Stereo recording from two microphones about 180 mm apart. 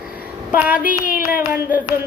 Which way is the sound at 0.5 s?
10° right (ahead or behind).